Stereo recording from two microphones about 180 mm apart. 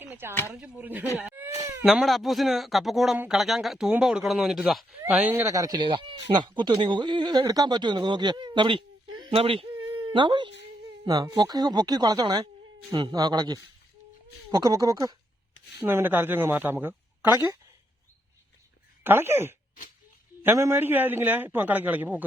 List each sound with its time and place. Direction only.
0.0 s a sound: 10° right (ahead or behind)
0.5 s a man's voice: 5° right (ahead or behind)
1.2 s baby cry: 10° right (ahead or behind)
1.8 s a man's voice: centre (ahead or behind)
19.0 s a man's voice: 15° right (ahead or behind)